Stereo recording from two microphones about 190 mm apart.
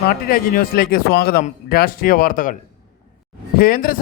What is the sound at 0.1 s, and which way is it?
Speech, 50° left (ahead or behind).